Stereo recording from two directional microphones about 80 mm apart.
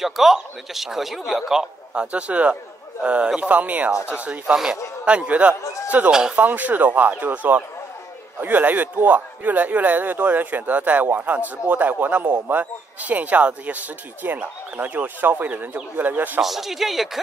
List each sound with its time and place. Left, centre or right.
0.0 s speech: centre
5.6 s a man's voice: left
5.9 s a man's voice: centre
16.3 s speech: centre